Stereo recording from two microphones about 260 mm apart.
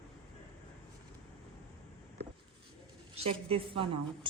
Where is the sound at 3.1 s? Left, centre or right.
Right.